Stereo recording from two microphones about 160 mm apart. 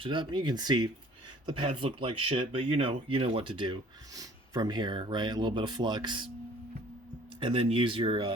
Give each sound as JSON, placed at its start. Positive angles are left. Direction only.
{"t": 0.0, "sound": "speech", "side_deg": -30}
{"t": 7.3, "sound": "speech", "side_deg": -35}